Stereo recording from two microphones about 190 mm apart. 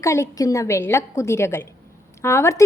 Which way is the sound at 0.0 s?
15° left (ahead or behind).